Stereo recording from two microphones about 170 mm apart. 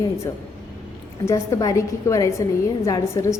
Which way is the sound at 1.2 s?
20° left (ahead or behind).